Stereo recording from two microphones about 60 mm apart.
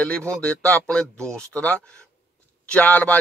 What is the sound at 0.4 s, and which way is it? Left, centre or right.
Speech, centre.